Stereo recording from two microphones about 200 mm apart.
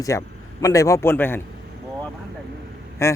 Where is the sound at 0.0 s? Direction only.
15° left (ahead or behind).